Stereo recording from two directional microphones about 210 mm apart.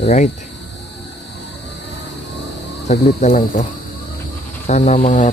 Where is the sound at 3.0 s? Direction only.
40° left (ahead or behind).